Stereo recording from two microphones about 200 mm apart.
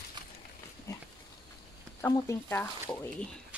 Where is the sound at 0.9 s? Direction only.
15° left (ahead or behind).